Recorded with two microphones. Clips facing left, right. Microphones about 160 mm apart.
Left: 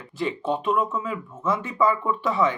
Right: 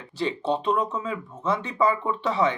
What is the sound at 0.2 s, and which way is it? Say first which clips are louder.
Speech: even; 30° right (ahead or behind).